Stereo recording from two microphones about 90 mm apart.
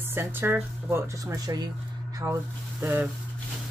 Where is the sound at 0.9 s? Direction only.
35° right (ahead or behind).